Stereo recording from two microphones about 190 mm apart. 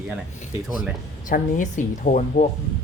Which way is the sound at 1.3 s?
45° left (ahead or behind).